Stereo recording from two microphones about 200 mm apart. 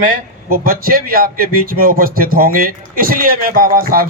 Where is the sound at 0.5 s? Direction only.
45° right (ahead or behind).